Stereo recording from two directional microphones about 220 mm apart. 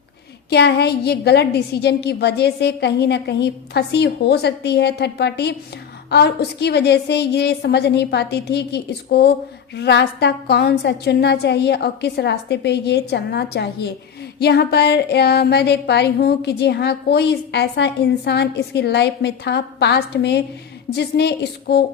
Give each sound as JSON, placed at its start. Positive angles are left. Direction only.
{"t": 0.5, "sound": "speech", "side_deg": 50}